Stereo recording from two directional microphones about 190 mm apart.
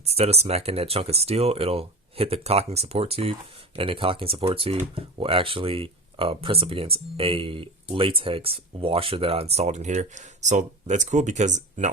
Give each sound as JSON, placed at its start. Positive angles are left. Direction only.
{"t": 0.2, "sound": "speech", "side_deg": -35}